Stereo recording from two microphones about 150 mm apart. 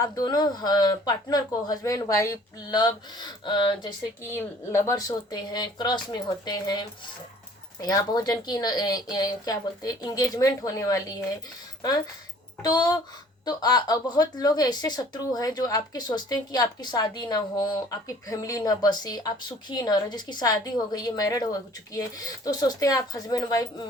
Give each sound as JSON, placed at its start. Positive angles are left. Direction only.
{"t": 0.0, "sound": "speech", "side_deg": 25}
{"t": 4.2, "sound": "speech", "side_deg": 15}